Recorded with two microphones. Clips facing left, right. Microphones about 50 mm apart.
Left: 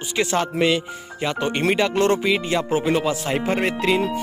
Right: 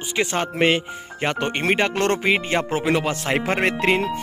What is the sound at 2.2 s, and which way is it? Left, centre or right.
Speech, right.